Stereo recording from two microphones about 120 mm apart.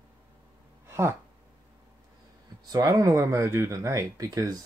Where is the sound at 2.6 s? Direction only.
30° right (ahead or behind).